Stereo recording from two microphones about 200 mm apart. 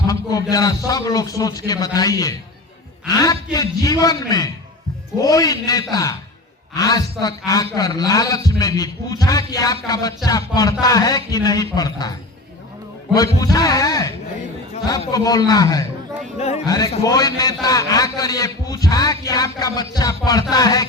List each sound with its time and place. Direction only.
0.1 s music: 20° left (ahead or behind)
0.5 s a man's voice: 15° left (ahead or behind)
13.1 s a man's voice: 20° left (ahead or behind)